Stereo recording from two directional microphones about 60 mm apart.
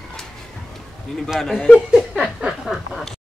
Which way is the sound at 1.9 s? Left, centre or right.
Centre.